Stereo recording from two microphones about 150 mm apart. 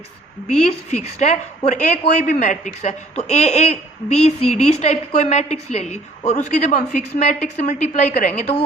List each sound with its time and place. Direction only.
0.6 s a woman's voice: 45° left (ahead or behind)